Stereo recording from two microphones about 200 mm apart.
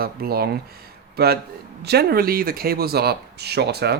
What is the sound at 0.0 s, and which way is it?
Speech, 50° right (ahead or behind).